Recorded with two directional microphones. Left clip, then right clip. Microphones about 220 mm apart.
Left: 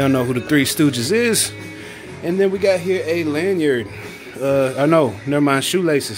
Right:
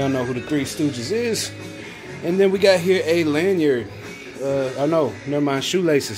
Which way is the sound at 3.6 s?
15° left (ahead or behind).